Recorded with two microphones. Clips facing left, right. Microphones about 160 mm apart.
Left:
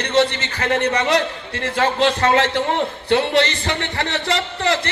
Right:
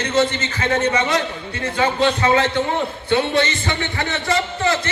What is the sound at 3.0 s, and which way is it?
Speech, 75° left (ahead or behind).